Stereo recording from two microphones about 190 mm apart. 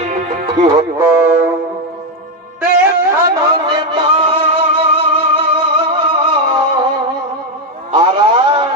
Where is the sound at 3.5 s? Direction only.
25° right (ahead or behind).